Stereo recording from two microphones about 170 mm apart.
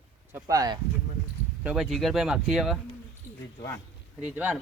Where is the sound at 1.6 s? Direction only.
5° right (ahead or behind).